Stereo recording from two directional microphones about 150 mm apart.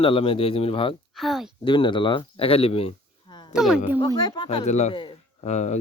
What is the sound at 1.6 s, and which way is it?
Speech, 30° left (ahead or behind).